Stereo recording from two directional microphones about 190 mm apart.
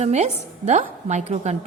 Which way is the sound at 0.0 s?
35° right (ahead or behind).